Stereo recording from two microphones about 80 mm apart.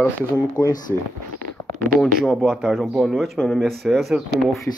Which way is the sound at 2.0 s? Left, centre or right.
Centre.